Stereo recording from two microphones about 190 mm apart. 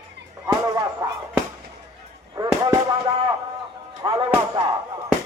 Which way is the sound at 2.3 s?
20° right (ahead or behind).